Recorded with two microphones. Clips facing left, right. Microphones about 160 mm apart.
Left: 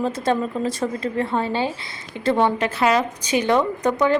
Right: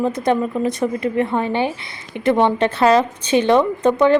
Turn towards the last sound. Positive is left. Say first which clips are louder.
# right 5 dB
turn(degrees=-25)  # may be behind; listen again after turning